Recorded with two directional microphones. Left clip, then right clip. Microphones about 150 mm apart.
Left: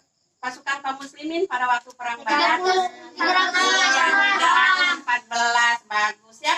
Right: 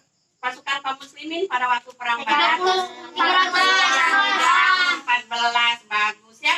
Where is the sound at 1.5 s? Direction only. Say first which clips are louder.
Right 1 dB; 25° left (ahead or behind).